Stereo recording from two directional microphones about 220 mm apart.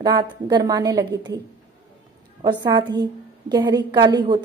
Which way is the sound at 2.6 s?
20° right (ahead or behind).